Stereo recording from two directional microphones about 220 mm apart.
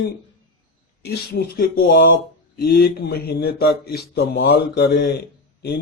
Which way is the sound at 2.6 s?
45° left (ahead or behind).